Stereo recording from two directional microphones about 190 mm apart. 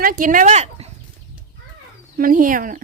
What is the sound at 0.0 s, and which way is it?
Speech, 45° right (ahead or behind).